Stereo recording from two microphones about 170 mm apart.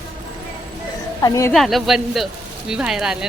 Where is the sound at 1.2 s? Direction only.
20° left (ahead or behind).